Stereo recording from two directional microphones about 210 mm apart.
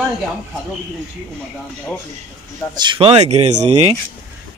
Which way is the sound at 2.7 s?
20° right (ahead or behind).